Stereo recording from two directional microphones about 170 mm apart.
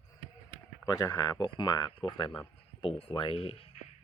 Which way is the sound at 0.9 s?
20° left (ahead or behind).